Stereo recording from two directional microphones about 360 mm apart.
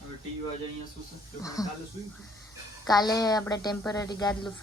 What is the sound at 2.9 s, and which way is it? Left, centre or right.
Speech, centre.